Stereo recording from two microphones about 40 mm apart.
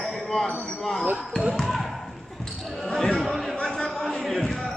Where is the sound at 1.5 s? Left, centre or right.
Centre.